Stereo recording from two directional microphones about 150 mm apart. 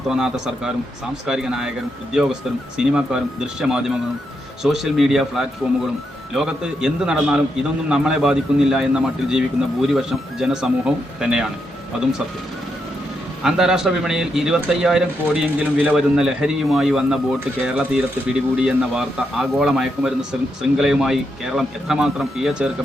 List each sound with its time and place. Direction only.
0.1 s speech: 5° right (ahead or behind)
13.4 s speech: 5° right (ahead or behind)